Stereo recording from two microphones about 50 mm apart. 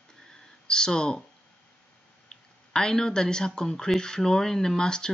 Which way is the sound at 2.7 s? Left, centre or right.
Centre.